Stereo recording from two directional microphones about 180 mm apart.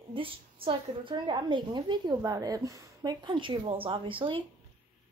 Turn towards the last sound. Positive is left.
turn(degrees=-30)  # may be behind; listen again after turning